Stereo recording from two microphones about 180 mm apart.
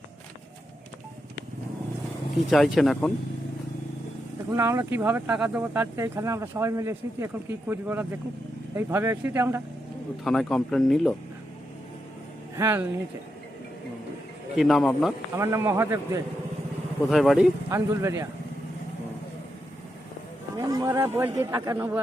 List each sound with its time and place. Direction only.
2.5 s speech: centre (ahead or behind)
4.5 s speech: 15° right (ahead or behind)
10.2 s speech: 5° left (ahead or behind)
12.5 s speech: 15° right (ahead or behind)
14.5 s speech: centre (ahead or behind)
15.4 s speech: 15° right (ahead or behind)
17.1 s speech: centre (ahead or behind)
17.7 s speech: 15° right (ahead or behind)
20.6 s speech: 20° right (ahead or behind)